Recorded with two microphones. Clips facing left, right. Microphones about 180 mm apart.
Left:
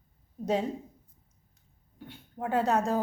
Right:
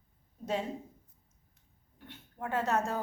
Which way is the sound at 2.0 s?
35° left (ahead or behind).